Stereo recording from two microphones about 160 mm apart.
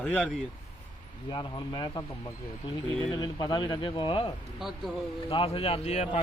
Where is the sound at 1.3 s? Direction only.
30° left (ahead or behind).